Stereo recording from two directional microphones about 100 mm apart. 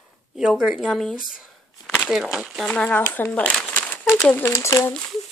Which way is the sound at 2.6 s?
10° left (ahead or behind).